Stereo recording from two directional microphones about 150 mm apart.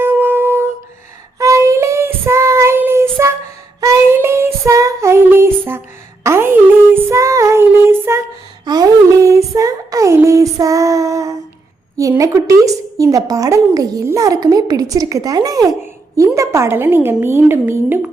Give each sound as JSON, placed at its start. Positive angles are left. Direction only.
{"t": 0.0, "sound": "humming", "side_deg": -15}
{"t": 1.4, "sound": "child singing", "side_deg": -20}
{"t": 8.6, "sound": "a sound", "side_deg": -25}
{"t": 11.9, "sound": "a woman's voice", "side_deg": -20}